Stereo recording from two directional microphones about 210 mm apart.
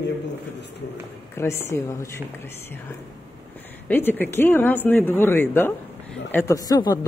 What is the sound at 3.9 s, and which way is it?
Speech, 10° left (ahead or behind).